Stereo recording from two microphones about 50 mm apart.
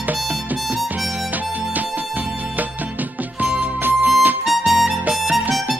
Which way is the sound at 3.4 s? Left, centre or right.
Right.